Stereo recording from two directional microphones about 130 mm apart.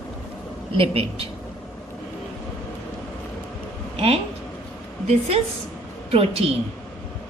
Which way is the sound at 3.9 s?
50° right (ahead or behind).